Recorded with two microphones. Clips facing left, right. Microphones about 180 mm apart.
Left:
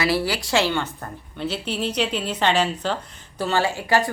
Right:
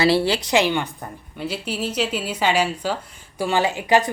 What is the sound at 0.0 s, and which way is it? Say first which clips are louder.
A woman's voice: right 4 dB; 25° right (ahead or behind).